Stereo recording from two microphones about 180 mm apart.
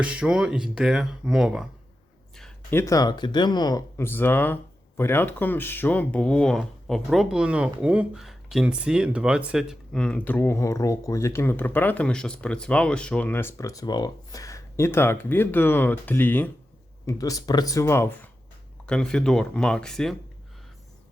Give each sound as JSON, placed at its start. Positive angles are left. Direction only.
{"t": 0.0, "sound": "speech", "side_deg": -5}
{"t": 2.3, "sound": "a sound", "side_deg": 0}
{"t": 2.7, "sound": "speech", "side_deg": 20}